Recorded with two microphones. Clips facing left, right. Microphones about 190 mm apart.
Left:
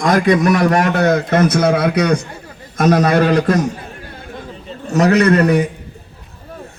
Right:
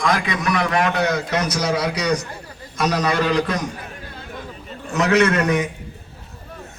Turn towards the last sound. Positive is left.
turn(degrees=35)  # may be behind; listen again after turning